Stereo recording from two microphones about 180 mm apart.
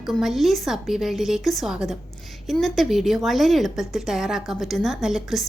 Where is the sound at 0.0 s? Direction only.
Centre (ahead or behind).